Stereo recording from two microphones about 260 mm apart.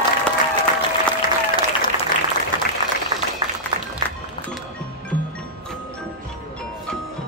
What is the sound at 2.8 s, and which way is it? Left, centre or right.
Applause, centre.